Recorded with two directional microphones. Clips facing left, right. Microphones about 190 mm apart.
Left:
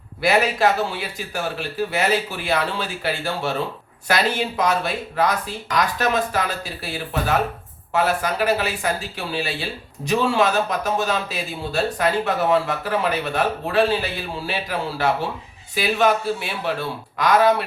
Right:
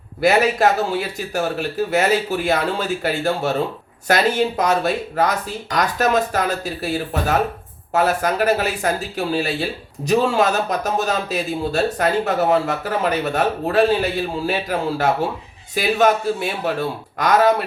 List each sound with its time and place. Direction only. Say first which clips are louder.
0.2 s a man's voice: right 3 dB; 45° right (ahead or behind)